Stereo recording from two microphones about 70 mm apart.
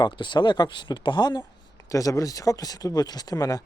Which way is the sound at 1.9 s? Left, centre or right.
Left.